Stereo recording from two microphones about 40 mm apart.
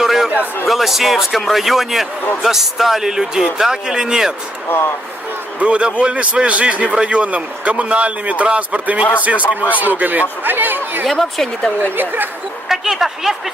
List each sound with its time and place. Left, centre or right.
0.0 s a sound: centre
0.6 s a man's voice: centre
5.5 s a man's voice: right
11.0 s speech: centre
11.8 s a woman's voice: right
12.6 s speech: centre